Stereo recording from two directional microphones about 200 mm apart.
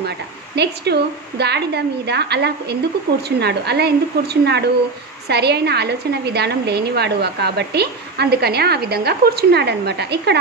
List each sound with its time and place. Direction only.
0.6 s a woman's voice: 55° right (ahead or behind)